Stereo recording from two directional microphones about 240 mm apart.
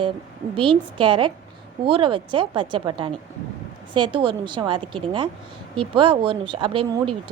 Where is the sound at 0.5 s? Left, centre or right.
Right.